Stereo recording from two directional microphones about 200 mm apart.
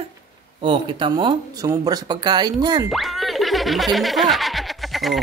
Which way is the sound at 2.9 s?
Centre (ahead or behind).